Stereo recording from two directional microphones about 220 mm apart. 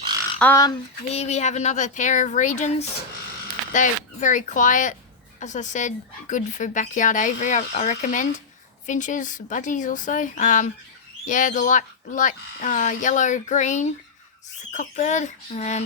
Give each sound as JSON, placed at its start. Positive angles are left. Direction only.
{"t": 0.3, "sound": "speech", "side_deg": 10}
{"t": 1.1, "sound": "speech", "side_deg": 30}